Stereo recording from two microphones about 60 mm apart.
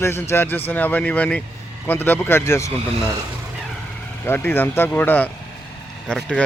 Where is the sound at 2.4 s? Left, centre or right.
Left.